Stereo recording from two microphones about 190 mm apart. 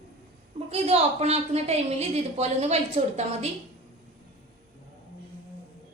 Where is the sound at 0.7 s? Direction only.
35° right (ahead or behind).